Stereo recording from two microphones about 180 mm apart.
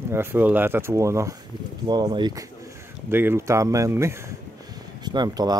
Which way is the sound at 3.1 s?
10° right (ahead or behind).